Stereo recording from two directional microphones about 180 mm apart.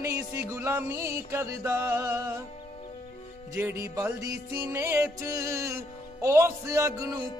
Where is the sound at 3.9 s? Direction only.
15° right (ahead or behind).